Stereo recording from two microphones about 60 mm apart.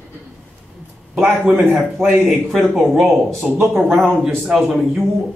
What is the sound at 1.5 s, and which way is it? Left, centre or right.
A man's voice, centre.